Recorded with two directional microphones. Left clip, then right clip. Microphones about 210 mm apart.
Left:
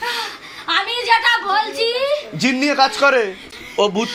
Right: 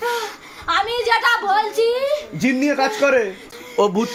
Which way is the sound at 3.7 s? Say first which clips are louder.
Even; 35° right (ahead or behind).